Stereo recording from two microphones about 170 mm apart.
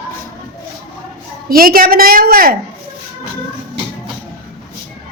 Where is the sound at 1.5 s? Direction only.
60° right (ahead or behind).